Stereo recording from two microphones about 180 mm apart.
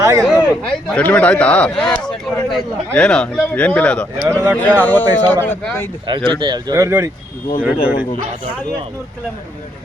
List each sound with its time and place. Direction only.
0.0 s speech: 20° right (ahead or behind)
0.3 s speech: 5° left (ahead or behind)
4.3 s speech: 15° right (ahead or behind)
4.5 s speech: 10° left (ahead or behind)
6.1 s speech: 30° right (ahead or behind)